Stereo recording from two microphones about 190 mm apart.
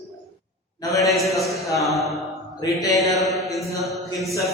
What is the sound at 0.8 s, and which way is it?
Speech, 15° left (ahead or behind).